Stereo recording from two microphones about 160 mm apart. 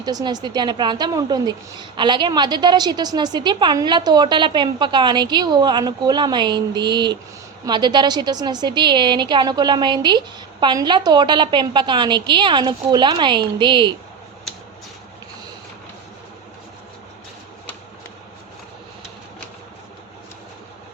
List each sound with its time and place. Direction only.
0.0 s a woman's voice: 25° right (ahead or behind)